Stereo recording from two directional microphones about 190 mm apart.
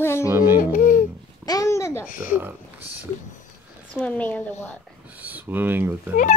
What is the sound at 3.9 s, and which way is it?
Speech, 5° left (ahead or behind).